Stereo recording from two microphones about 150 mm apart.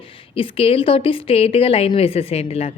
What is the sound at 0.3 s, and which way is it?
A woman's voice, 40° left (ahead or behind).